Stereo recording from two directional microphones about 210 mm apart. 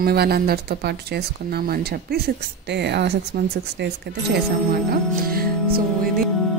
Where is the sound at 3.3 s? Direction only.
40° right (ahead or behind).